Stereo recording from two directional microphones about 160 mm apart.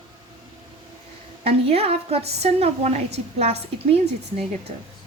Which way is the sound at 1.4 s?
40° right (ahead or behind).